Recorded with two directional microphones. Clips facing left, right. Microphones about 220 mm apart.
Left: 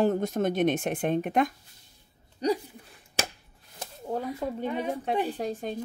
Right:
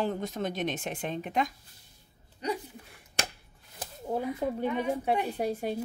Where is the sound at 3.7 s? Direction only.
10° right (ahead or behind).